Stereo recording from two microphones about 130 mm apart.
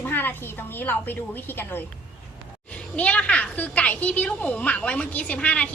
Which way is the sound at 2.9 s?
10° left (ahead or behind).